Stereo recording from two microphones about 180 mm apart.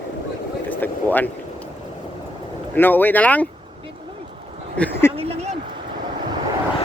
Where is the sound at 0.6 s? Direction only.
10° left (ahead or behind).